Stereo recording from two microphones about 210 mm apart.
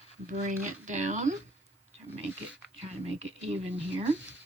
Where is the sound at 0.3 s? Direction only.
35° right (ahead or behind).